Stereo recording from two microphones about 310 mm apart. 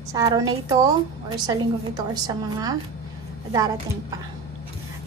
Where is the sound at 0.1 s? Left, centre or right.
Centre.